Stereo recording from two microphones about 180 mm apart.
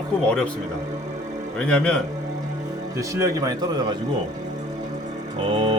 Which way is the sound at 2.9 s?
15° right (ahead or behind).